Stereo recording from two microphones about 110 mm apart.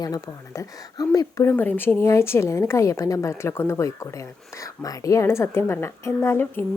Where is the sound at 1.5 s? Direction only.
15° left (ahead or behind).